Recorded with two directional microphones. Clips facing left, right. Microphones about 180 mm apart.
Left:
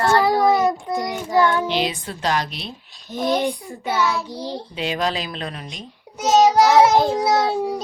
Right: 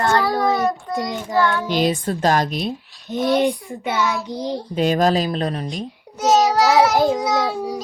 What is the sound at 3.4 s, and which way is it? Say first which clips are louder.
Child singing: right 4 dB; 20° right (ahead or behind).